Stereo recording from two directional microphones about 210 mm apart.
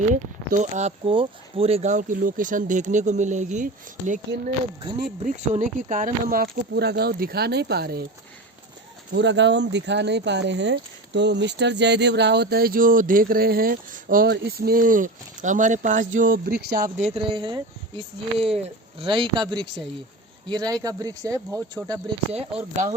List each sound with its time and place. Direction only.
0.1 s speech: 35° right (ahead or behind)
9.1 s speech: 55° right (ahead or behind); by 17.1 s 40° right (ahead or behind)
17.2 s speech: 25° right (ahead or behind)